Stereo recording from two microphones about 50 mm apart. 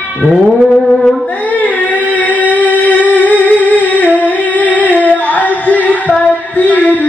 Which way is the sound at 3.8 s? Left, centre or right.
Left.